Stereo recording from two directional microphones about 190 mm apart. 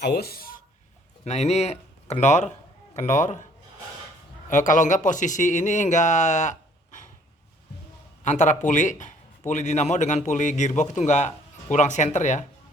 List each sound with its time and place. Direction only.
0.0 s speech: 55° left (ahead or behind)
1.2 s a man's voice: 35° left (ahead or behind)
4.4 s a man's voice: 40° left (ahead or behind)
8.2 s a man's voice: 40° left (ahead or behind)